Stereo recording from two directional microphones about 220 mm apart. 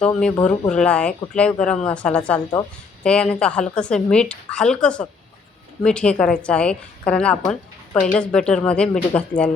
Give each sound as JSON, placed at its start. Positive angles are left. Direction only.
{"t": 0.0, "sound": "a woman's voice", "side_deg": 5}